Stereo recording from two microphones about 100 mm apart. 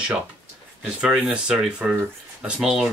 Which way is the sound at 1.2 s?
10° right (ahead or behind).